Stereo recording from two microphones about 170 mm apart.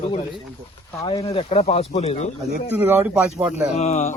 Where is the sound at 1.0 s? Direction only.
30° left (ahead or behind).